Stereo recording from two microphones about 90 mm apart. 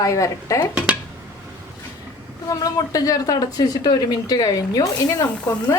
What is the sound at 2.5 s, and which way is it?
Speech, 40° left (ahead or behind).